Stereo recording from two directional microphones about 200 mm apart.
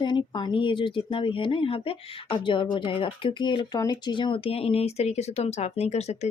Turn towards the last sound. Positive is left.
turn(degrees=35)  # may be behind; listen again after turning